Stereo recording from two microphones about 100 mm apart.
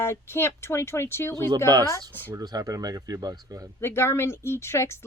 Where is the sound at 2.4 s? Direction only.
40° right (ahead or behind).